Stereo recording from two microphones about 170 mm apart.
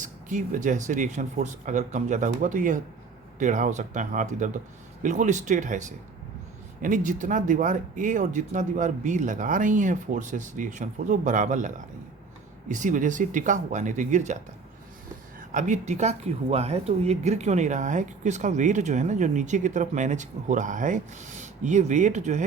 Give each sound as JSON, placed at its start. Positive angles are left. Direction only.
{"t": 0.0, "sound": "speech", "side_deg": -50}
{"t": 6.8, "sound": "speech", "side_deg": -50}
{"t": 15.4, "sound": "speech", "side_deg": -50}